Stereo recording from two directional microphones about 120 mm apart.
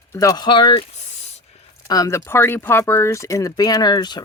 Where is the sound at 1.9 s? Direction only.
30° left (ahead or behind).